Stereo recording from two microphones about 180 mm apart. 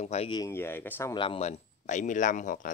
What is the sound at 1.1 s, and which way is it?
Speech, 30° left (ahead or behind).